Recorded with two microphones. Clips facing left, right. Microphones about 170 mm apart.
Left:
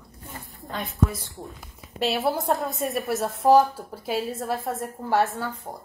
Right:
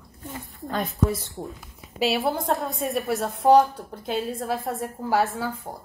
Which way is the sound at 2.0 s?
Centre (ahead or behind).